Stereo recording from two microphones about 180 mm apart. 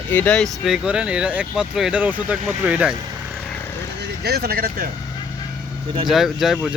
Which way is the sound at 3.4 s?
10° left (ahead or behind).